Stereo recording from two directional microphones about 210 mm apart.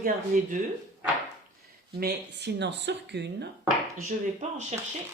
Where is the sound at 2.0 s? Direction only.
55° right (ahead or behind).